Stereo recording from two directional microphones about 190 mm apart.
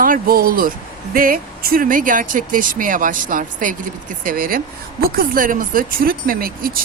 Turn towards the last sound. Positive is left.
turn(degrees=-50)  # may be behind; listen again after turning